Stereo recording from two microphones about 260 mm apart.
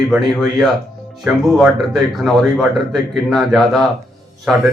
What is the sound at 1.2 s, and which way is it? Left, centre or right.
Speech, centre.